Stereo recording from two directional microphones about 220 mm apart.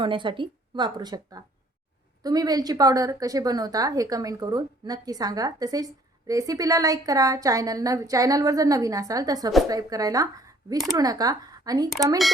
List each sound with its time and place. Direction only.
0.0 s a woman's voice: 20° right (ahead or behind)